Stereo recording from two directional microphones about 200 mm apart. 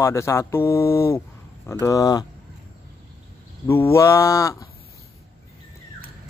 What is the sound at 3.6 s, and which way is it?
Speech, 15° left (ahead or behind).